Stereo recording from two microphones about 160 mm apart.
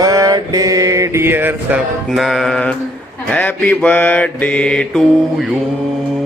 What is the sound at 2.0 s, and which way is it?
Mantra, centre (ahead or behind).